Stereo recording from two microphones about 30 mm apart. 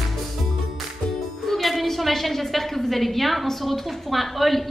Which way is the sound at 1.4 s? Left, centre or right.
Centre.